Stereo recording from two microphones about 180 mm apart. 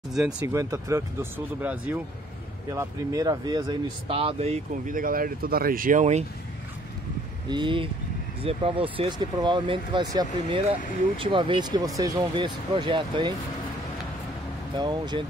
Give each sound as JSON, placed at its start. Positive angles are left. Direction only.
{"t": 0.1, "sound": "speech", "side_deg": -5}
{"t": 0.4, "sound": "speech", "side_deg": -15}
{"t": 7.4, "sound": "speech", "side_deg": -25}
{"t": 14.8, "sound": "speech", "side_deg": -25}